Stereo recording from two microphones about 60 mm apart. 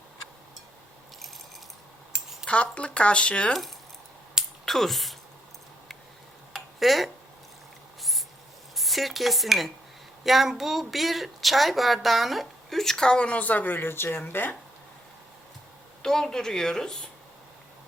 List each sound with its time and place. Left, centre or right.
2.1 s a sound: centre
2.5 s speech: left
4.6 s speech: centre
6.5 s tick-tock: centre
8.7 s a woman's voice: centre; by 14.5 s left
16.0 s speech: centre